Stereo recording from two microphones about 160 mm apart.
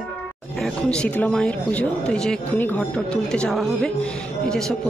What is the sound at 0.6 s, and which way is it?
Speech, 5° left (ahead or behind).